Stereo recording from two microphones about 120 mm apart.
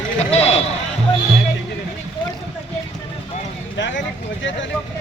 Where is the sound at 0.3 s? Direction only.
60° left (ahead or behind).